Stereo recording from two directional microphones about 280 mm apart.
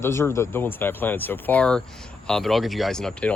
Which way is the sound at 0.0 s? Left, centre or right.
Centre.